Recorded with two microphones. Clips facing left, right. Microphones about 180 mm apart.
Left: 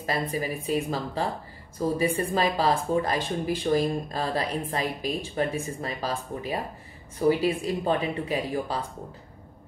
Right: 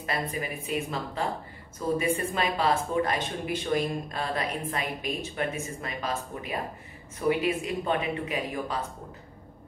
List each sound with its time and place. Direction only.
0.0 s speech: 35° left (ahead or behind)